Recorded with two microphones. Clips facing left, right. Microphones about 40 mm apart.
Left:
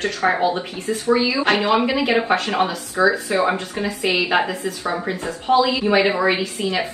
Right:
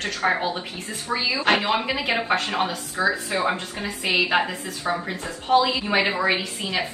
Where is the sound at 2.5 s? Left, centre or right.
Left.